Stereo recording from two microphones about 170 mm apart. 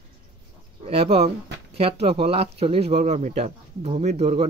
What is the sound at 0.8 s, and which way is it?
Speech, 35° right (ahead or behind).